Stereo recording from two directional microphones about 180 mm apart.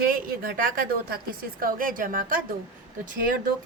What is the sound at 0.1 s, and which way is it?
A woman's voice, 50° right (ahead or behind).